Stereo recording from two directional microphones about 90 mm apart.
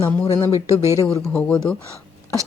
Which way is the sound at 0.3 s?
35° left (ahead or behind).